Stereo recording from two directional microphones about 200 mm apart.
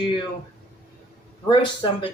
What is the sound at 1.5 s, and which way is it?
Speech, 25° left (ahead or behind).